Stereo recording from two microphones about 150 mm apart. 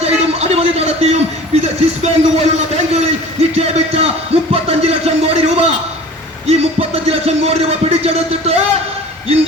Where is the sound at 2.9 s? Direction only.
45° right (ahead or behind).